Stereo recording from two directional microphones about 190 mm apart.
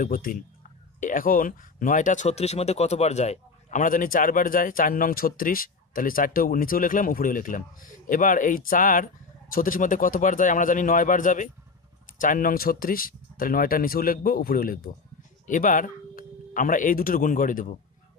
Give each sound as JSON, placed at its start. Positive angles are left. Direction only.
{"t": 0.0, "sound": "speech", "side_deg": 45}